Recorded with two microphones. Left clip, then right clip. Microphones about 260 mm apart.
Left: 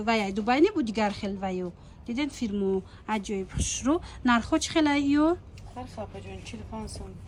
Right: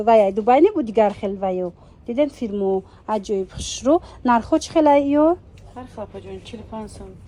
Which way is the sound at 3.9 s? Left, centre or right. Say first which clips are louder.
Right 10 dB; centre.